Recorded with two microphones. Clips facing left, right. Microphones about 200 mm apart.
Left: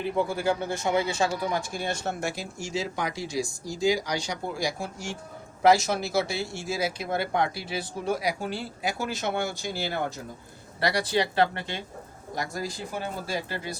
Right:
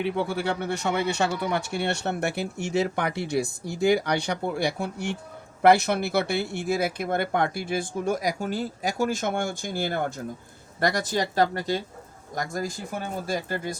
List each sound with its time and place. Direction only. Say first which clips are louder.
0.0 s speech: even; 70° right (ahead or behind); by 13.7 s 45° right (ahead or behind)